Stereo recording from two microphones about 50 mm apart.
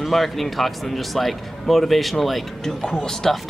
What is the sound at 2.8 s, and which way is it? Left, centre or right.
Speech, centre.